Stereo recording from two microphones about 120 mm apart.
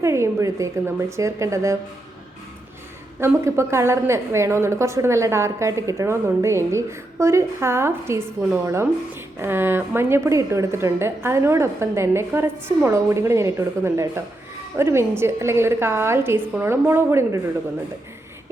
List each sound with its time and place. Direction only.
0.0 s a woman's voice: 25° right (ahead or behind)
3.2 s a woman's voice: 20° right (ahead or behind)